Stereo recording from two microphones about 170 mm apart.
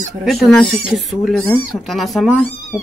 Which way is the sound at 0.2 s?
Centre (ahead or behind).